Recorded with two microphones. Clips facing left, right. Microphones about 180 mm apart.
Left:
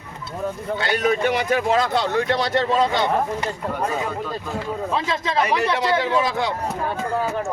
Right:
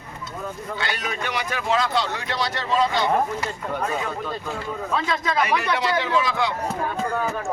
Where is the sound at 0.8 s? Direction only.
50° left (ahead or behind).